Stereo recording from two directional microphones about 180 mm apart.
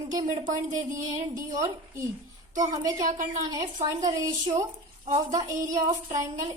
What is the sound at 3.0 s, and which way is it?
Speech, 45° right (ahead or behind).